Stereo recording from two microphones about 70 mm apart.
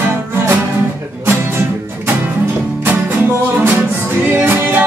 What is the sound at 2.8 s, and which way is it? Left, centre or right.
Music, right.